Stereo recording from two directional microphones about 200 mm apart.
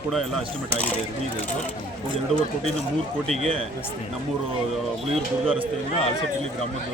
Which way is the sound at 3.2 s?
Centre (ahead or behind).